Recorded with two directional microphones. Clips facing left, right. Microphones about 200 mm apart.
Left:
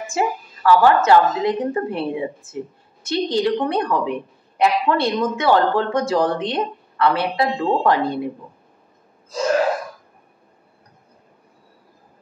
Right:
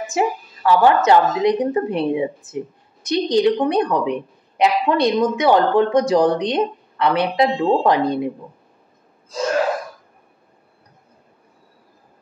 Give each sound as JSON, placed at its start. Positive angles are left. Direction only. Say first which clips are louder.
{"t": 0.1, "sound": "a woman's voice", "louder": "right 1 dB", "side_deg": -20}